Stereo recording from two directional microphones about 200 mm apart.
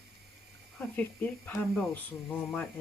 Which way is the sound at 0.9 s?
10° left (ahead or behind).